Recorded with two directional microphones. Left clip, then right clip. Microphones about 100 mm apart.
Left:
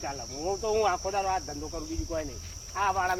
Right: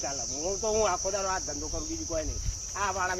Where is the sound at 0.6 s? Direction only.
20° right (ahead or behind).